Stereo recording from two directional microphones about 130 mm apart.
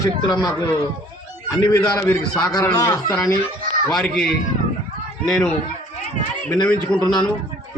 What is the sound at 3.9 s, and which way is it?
A man's voice, 5° left (ahead or behind).